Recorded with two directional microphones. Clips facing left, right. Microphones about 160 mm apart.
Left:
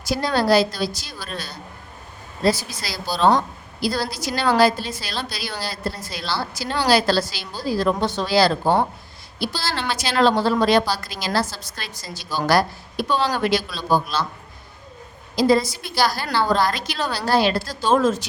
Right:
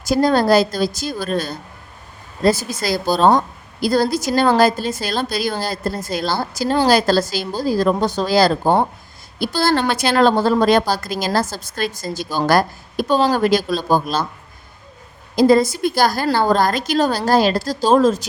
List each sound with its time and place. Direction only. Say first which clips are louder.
0.0 s a woman's voice: right 6 dB; 45° right (ahead or behind)
15.4 s a woman's voice: right 5 dB; 50° right (ahead or behind)